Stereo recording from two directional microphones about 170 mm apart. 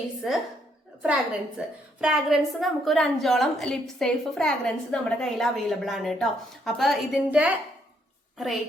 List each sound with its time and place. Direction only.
0.2 s a woman's voice: centre (ahead or behind)
1.5 s a woman's voice: 5° right (ahead or behind)